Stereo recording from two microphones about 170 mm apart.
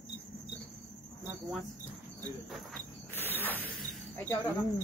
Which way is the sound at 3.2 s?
10° left (ahead or behind).